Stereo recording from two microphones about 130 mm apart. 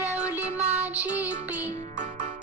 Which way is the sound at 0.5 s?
55° right (ahead or behind).